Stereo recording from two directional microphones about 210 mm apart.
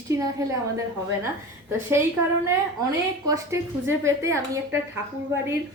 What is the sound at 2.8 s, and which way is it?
A woman's voice, 15° right (ahead or behind).